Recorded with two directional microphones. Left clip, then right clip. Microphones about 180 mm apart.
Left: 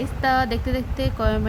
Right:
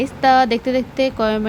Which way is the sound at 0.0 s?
20° right (ahead or behind).